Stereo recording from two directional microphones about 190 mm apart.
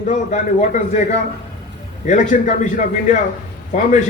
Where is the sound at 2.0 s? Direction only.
40° left (ahead or behind).